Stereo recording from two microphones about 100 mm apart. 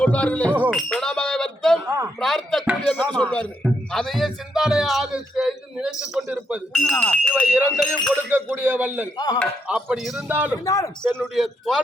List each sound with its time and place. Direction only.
0.0 s speech: 15° left (ahead or behind)
0.7 s chink: 5° left (ahead or behind)
2.2 s speech: 5° left (ahead or behind)
3.1 s speech: 15° left (ahead or behind)
3.9 s speech: centre (ahead or behind)
6.7 s speech: 5° left (ahead or behind)
7.3 s speech: 10° right (ahead or behind)
8.1 s a man's voice: 20° right (ahead or behind)
9.1 s speech: 40° left (ahead or behind)
9.6 s speech: 10° right (ahead or behind)
10.2 s speech: 15° right (ahead or behind)
10.7 s speech: 30° left (ahead or behind)
11.0 s a man's voice: 20° right (ahead or behind)
11.3 s speech: centre (ahead or behind)